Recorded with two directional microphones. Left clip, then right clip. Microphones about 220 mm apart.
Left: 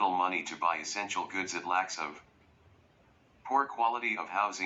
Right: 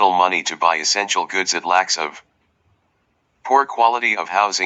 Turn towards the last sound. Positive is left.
turn(degrees=-50)  # may be behind; listen again after turning